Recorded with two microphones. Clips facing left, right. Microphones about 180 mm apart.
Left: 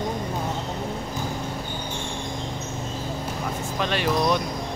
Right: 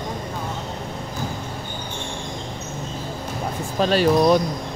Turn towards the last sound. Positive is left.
turn(degrees=-35)  # may be behind; listen again after turning